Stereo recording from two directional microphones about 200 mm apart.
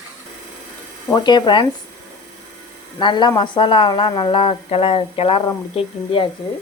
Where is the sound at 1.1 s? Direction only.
20° left (ahead or behind).